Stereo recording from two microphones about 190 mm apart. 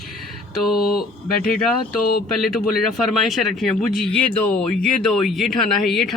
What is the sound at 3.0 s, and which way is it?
Speech, centre (ahead or behind).